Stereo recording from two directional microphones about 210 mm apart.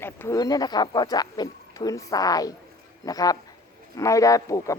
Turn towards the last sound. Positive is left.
turn(degrees=15)  # may be behind; listen again after turning